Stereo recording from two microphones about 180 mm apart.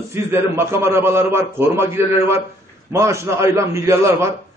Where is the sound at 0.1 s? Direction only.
15° right (ahead or behind).